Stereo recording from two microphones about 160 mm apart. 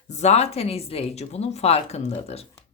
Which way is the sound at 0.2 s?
40° left (ahead or behind).